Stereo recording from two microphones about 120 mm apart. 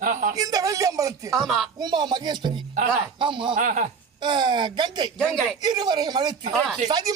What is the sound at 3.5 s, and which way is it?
Speech, 90° right.